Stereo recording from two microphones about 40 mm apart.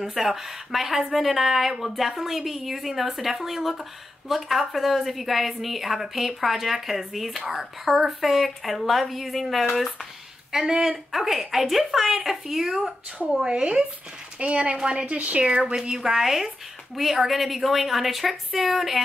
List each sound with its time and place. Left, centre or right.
0.0 s a woman's voice: centre
10.5 s speech: centre
13.5 s a woman's voice: right
15.3 s speech: right
16.2 s a woman's voice: centre